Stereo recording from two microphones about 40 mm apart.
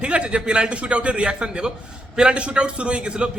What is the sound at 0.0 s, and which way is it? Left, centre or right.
A man's voice, right.